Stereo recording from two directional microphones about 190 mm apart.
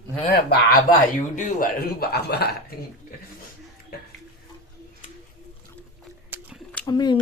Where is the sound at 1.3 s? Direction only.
45° left (ahead or behind).